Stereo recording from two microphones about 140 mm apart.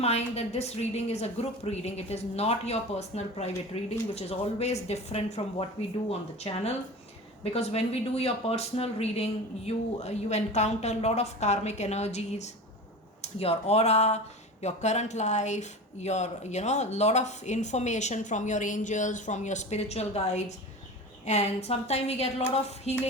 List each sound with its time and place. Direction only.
0.0 s a woman's voice: 50° left (ahead or behind)